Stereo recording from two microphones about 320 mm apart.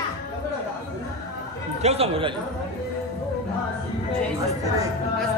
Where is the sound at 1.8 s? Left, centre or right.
Centre.